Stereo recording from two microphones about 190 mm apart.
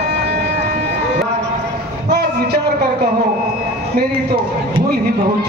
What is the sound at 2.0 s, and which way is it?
Music, 60° right (ahead or behind).